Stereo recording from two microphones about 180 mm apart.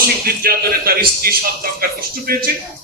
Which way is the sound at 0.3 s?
55° right (ahead or behind).